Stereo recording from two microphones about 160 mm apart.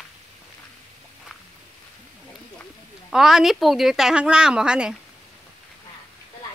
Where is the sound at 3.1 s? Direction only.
Centre (ahead or behind).